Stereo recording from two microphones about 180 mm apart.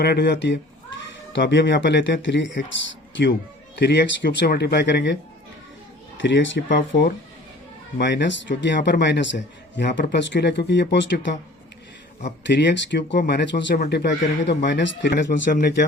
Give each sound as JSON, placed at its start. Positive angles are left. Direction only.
{"t": 0.0, "sound": "a man's voice", "side_deg": 65}
{"t": 1.0, "sound": "speech", "side_deg": 85}
{"t": 3.8, "sound": "a man's voice", "side_deg": 65}
{"t": 6.1, "sound": "a man's voice", "side_deg": 90}
{"t": 12.5, "sound": "a man's voice", "side_deg": 75}
{"t": 13.1, "sound": "a man's voice", "side_deg": 65}
{"t": 15.1, "sound": "speech", "side_deg": 45}